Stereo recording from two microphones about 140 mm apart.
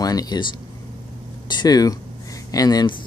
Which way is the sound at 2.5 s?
25° left (ahead or behind).